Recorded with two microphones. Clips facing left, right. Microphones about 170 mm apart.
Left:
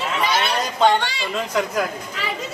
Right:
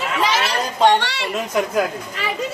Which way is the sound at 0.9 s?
75° right (ahead or behind).